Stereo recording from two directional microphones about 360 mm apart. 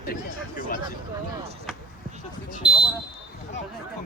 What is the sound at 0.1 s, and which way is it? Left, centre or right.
Speech, left.